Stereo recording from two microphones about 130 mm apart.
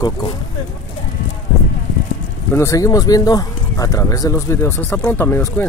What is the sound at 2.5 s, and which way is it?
Speech, 25° left (ahead or behind).